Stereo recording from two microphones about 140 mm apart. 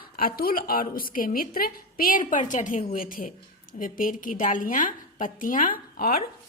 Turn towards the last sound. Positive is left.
turn(degrees=90)